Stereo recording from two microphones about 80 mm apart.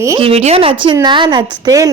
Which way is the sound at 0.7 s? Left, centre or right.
Right.